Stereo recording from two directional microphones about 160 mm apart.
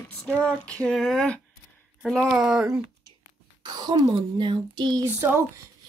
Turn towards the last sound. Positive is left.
turn(degrees=-15)  # may be behind; listen again after turning